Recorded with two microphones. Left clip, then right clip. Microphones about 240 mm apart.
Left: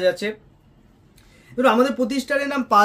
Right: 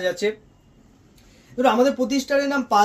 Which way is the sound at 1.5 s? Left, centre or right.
Left.